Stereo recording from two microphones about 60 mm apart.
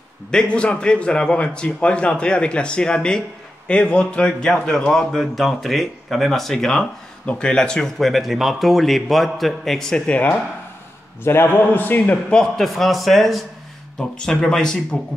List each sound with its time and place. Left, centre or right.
0.3 s a man's voice: centre
8.0 s speech: centre
11.2 s a man's voice: left
12.3 s a man's voice: centre
12.6 s speech: centre
13.9 s a man's voice: centre